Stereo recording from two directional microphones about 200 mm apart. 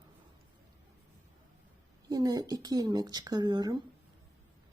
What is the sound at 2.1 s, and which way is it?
Speech, 20° right (ahead or behind).